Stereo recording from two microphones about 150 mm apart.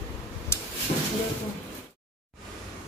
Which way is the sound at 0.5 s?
20° left (ahead or behind).